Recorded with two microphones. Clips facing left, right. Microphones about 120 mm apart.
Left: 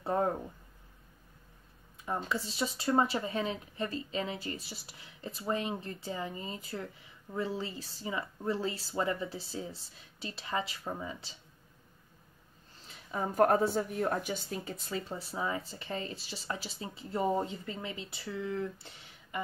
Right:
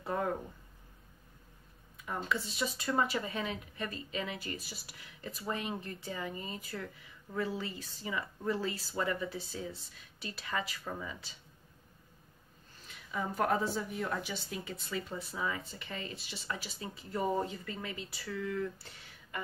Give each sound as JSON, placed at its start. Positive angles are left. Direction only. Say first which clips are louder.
{"t": 0.0, "sound": "a sound", "louder": "left 4 dB", "side_deg": 35}
{"t": 2.0, "sound": "speech", "louder": "left 1 dB", "side_deg": 30}
{"t": 12.8, "sound": "speech", "louder": "left 2 dB", "side_deg": 40}